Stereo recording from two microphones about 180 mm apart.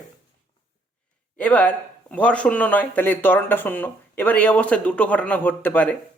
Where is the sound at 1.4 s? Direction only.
10° left (ahead or behind).